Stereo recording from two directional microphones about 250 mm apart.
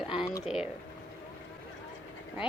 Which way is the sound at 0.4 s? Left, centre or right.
Centre.